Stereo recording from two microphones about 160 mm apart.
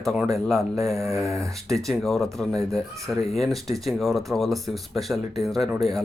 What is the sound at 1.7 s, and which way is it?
Speech, centre (ahead or behind).